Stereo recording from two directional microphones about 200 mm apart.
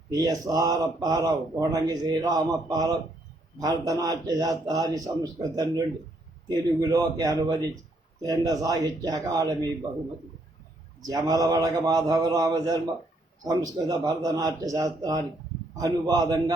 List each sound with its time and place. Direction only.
0.1 s a man's voice: 20° right (ahead or behind)
11.0 s a man's voice: 20° right (ahead or behind)